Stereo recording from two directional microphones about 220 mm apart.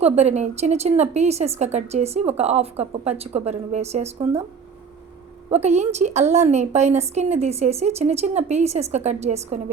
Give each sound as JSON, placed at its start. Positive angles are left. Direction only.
{"t": 0.0, "sound": "a woman's voice", "side_deg": -30}
{"t": 5.5, "sound": "a woman's voice", "side_deg": -30}